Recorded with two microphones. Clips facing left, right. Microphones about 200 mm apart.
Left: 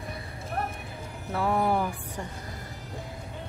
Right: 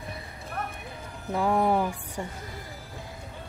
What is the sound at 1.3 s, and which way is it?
Speech, 15° right (ahead or behind).